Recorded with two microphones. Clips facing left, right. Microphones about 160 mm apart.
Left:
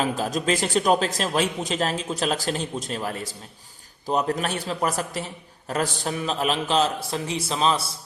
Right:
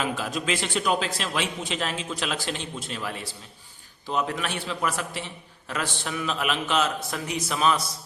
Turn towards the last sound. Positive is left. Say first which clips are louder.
# left 1 dB
turn(degrees=30)  # may be behind; listen again after turning